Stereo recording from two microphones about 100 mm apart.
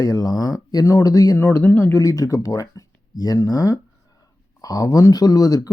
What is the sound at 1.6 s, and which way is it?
Speech, 25° left (ahead or behind).